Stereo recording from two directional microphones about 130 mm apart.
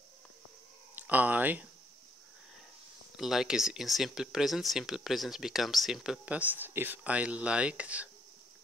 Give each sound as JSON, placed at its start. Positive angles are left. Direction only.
{"t": 0.9, "sound": "speech", "side_deg": -10}
{"t": 3.2, "sound": "speech", "side_deg": -5}
{"t": 6.2, "sound": "speech", "side_deg": -10}